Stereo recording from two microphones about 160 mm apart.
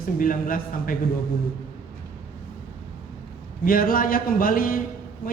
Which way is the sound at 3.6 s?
65° left (ahead or behind).